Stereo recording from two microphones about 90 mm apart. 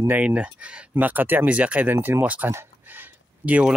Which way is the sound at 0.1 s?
15° right (ahead or behind).